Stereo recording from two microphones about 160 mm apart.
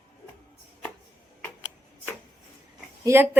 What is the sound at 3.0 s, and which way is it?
Speech, 15° right (ahead or behind).